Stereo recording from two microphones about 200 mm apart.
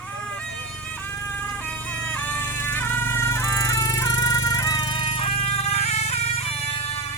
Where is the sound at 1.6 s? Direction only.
5° left (ahead or behind); by 7.0 s 30° left (ahead or behind).